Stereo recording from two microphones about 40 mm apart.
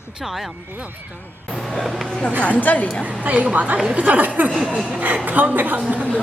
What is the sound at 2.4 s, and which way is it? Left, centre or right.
Speech, left.